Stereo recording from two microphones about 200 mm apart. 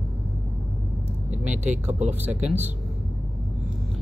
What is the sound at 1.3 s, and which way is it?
Vehicle, 35° right (ahead or behind).